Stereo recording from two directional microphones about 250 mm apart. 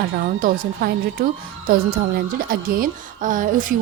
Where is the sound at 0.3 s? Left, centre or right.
Right.